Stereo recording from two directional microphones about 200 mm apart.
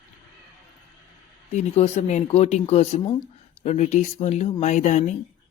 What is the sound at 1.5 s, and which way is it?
Speech, 35° left (ahead or behind).